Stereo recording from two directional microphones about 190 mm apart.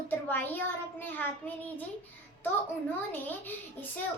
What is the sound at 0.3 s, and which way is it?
A child's voice, 10° left (ahead or behind).